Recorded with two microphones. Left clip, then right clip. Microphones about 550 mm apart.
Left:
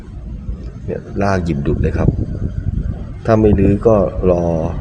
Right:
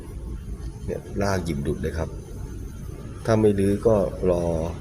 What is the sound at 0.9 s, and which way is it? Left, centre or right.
A man's voice, right.